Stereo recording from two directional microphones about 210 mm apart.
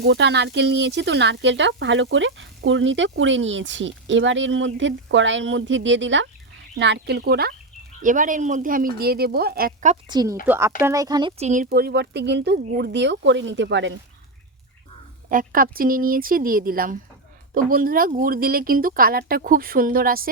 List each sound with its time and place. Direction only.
0.0 s speech: 55° right (ahead or behind)
8.0 s speech: 40° right (ahead or behind)
9.9 s speech: 20° right (ahead or behind)
10.4 s speech: 10° right (ahead or behind)
11.4 s speech: 40° right (ahead or behind); by 13.9 s 60° right (ahead or behind)
15.3 s speech: 40° right (ahead or behind)